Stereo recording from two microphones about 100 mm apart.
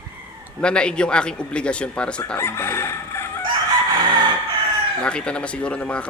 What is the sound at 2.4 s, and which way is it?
Crowing, 25° left (ahead or behind).